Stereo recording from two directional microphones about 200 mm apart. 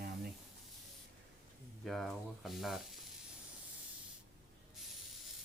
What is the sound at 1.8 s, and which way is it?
Speech, centre (ahead or behind).